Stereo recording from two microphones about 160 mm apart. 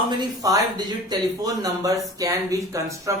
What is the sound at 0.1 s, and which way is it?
Speech, 25° right (ahead or behind).